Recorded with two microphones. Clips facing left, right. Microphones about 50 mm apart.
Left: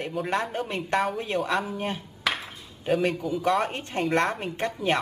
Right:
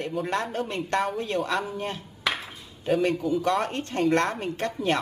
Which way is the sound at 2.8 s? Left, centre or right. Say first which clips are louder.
Right 1 dB; centre.